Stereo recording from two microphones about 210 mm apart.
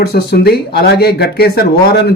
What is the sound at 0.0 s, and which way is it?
A man's voice, 50° left (ahead or behind).